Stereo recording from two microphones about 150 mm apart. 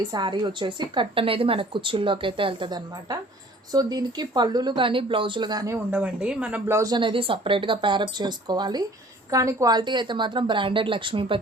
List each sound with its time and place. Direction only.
0.0 s a woman's voice: 30° right (ahead or behind); by 6.7 s 10° right (ahead or behind)
6.7 s a woman's voice: 25° right (ahead or behind)